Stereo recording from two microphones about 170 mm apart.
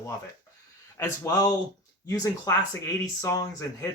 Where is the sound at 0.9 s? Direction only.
20° left (ahead or behind).